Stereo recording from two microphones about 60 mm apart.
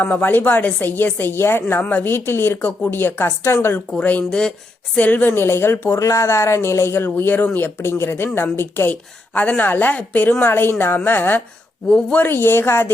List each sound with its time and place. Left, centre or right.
0.0 s a woman's voice: left
1.8 s a woman's voice: left
2.0 s a woman's voice: left
4.3 s speech: centre
4.9 s a woman's voice: left
6.0 s a woman's voice: left
8.9 s a woman's voice: left